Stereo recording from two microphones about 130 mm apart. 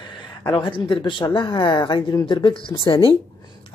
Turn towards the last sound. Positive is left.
turn(degrees=45)  # may be behind; listen again after turning